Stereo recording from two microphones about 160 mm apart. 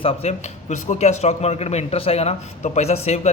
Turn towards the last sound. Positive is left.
turn(degrees=45)  # may be behind; listen again after turning